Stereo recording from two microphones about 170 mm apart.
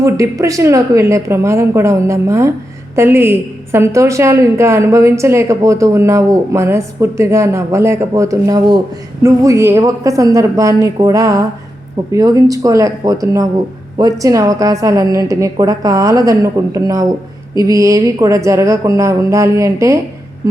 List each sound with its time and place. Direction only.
0.0 s a woman's voice: 20° right (ahead or behind)